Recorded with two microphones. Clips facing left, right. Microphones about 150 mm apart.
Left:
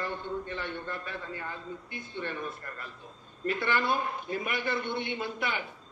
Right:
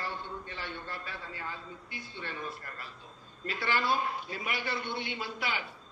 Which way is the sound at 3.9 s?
55° left (ahead or behind).